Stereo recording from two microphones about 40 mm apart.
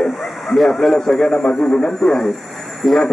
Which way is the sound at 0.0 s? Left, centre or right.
Centre.